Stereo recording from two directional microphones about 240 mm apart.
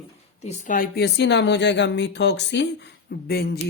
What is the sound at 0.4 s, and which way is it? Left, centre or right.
Speech, left.